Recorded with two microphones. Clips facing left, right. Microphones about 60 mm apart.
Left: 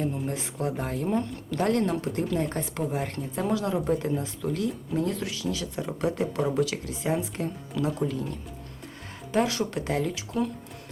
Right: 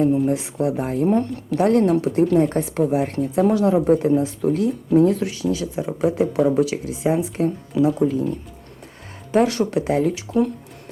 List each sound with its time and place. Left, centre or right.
0.0 s a woman's voice: centre
10.3 s speech: right